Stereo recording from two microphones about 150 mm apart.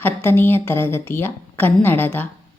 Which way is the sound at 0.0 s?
15° left (ahead or behind).